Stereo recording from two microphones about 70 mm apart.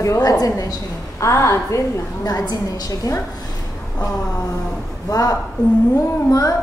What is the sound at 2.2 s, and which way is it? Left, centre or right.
Speech, left.